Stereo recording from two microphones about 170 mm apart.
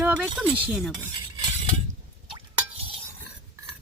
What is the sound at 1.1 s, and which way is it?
Cutlery, 30° right (ahead or behind).